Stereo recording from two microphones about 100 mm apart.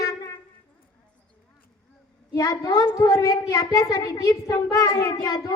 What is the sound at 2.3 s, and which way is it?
A child's voice, 35° left (ahead or behind).